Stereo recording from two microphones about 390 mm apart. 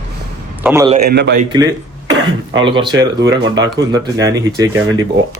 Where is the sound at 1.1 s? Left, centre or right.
Right.